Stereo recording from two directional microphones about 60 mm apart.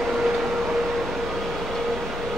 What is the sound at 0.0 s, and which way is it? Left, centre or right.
Train, centre.